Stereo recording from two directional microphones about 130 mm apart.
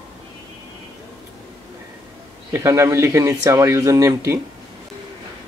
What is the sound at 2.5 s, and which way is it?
Speech, 20° right (ahead or behind).